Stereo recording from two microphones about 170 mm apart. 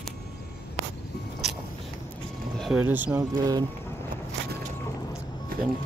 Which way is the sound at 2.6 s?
5° right (ahead or behind).